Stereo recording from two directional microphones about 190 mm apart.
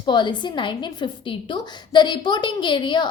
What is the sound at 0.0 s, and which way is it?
A woman's voice, 25° left (ahead or behind).